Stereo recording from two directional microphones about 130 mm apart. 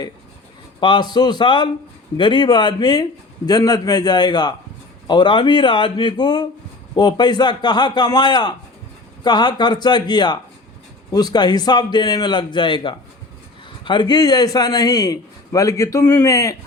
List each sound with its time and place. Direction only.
0.8 s a man's voice: 35° left (ahead or behind)